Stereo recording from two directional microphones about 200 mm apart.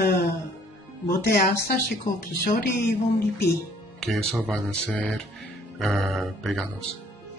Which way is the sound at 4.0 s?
Centre (ahead or behind).